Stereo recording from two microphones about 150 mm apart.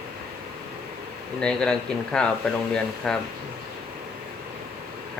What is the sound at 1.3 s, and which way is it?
Speech, 5° left (ahead or behind).